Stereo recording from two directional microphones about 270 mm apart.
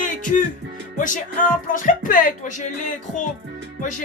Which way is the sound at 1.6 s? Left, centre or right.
Left.